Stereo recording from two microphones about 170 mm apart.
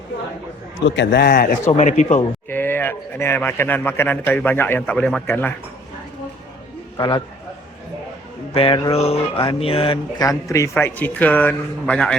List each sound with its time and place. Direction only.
0.9 s a man's voice: 90° left
1.3 s speech: 55° left (ahead or behind)
1.7 s speech: 45° left (ahead or behind)
2.5 s speech: 10° left (ahead or behind)
6.9 s a man's voice: 25° left (ahead or behind)
8.5 s a sound: 30° left (ahead or behind)
10.2 s speech: 20° left (ahead or behind)